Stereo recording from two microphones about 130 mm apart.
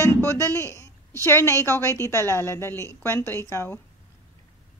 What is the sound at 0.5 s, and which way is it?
A woman's voice, 20° left (ahead or behind).